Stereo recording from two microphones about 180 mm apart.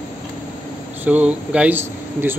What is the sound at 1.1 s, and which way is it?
Speech, 5° right (ahead or behind).